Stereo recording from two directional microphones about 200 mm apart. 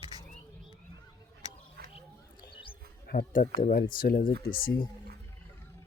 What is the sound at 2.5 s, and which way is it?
Mouse, 25° left (ahead or behind).